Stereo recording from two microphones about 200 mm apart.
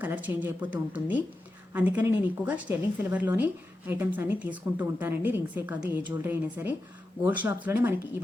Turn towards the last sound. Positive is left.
turn(degrees=-10)  # may be behind; listen again after turning